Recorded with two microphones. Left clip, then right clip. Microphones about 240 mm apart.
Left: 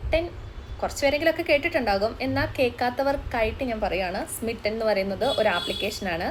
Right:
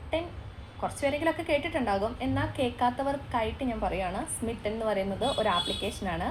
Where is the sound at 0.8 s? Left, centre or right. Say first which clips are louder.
Left 6 dB; left.